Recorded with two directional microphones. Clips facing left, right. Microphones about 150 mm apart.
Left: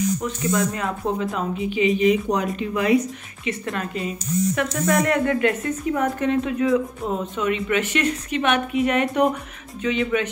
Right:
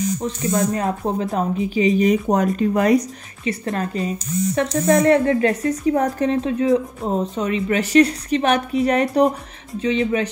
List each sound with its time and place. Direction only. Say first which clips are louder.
0.2 s speech: right 2 dB; 35° right (ahead or behind)